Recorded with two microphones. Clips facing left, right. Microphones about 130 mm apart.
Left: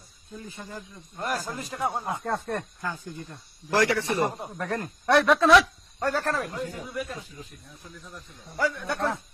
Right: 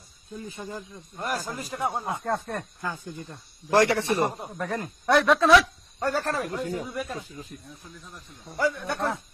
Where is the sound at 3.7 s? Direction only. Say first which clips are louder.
Right 3 dB; 25° right (ahead or behind).